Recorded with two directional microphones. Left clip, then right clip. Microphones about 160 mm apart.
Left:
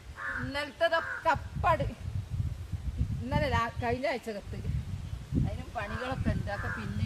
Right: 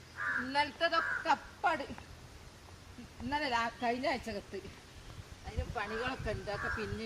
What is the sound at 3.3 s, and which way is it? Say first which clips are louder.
A woman's voice: left 3 dB; 20° left (ahead or behind).